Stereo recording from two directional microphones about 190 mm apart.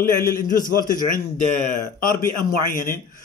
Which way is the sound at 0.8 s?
45° left (ahead or behind).